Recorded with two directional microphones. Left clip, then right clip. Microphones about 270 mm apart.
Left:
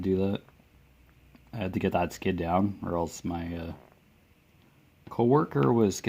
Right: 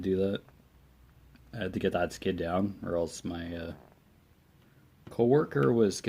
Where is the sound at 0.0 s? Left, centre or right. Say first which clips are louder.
Left 1 dB; left.